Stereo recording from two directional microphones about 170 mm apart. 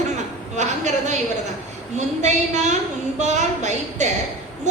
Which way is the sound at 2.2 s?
45° right (ahead or behind).